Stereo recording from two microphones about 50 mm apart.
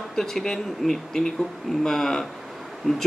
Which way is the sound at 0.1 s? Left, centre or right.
Centre.